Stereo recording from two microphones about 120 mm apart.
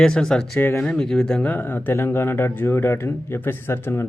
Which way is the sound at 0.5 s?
15° left (ahead or behind).